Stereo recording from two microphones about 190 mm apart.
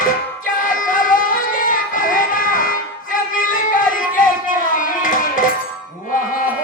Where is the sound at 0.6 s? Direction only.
45° left (ahead or behind).